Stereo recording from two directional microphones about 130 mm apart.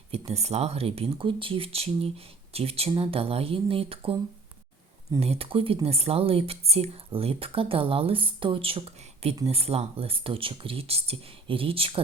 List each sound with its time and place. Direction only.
0.1 s speech: 55° right (ahead or behind)
5.2 s speech: 50° right (ahead or behind)